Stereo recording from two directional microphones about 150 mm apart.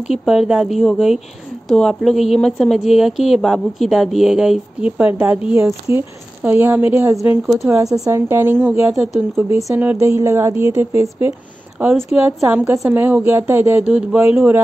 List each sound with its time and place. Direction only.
0.1 s a woman's voice: centre (ahead or behind)